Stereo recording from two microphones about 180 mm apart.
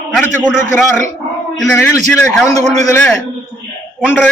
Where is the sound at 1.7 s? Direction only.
15° left (ahead or behind).